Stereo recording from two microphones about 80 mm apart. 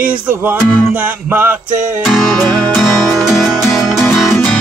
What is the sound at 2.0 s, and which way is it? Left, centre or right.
Music, centre.